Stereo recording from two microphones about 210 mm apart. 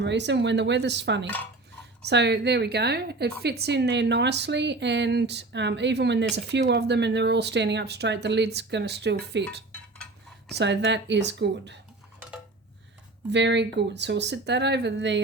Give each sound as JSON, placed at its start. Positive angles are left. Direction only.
{"t": 0.0, "sound": "a woman's voice", "side_deg": -55}
{"t": 13.3, "sound": "speech", "side_deg": -55}